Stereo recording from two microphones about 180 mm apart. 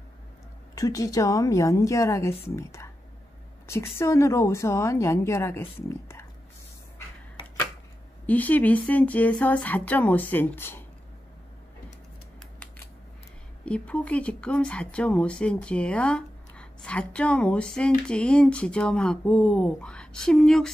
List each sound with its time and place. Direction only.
0.7 s a woman's voice: 20° left (ahead or behind)
8.3 s a woman's voice: 10° left (ahead or behind)
12.4 s scissors: 5° left (ahead or behind)
13.7 s speech: 5° left (ahead or behind)